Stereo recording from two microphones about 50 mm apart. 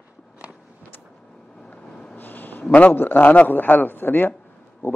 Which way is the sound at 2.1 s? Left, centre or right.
Left.